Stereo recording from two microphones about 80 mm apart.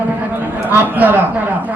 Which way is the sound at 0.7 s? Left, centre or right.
Right.